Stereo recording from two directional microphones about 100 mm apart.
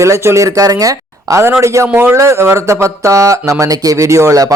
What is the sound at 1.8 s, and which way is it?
Speech, 20° right (ahead or behind).